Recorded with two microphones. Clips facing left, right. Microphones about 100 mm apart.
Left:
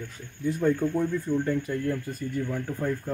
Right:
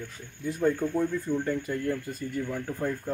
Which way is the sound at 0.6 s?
Centre (ahead or behind).